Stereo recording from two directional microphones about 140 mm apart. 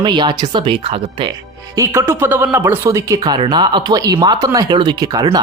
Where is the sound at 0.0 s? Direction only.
35° right (ahead or behind).